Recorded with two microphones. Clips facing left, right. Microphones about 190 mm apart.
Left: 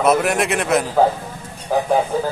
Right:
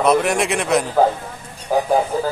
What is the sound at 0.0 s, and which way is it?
Speech, centre (ahead or behind).